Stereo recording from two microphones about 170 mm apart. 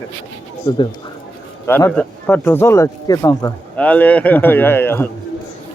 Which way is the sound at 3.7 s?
10° left (ahead or behind).